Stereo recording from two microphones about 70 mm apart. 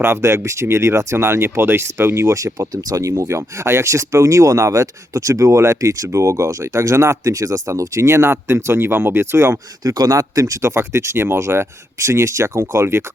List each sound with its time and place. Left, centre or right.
0.0 s speech: right
9.8 s speech: right
10.8 s speech: right